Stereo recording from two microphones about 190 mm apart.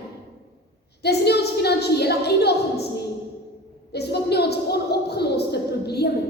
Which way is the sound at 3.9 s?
60° left (ahead or behind).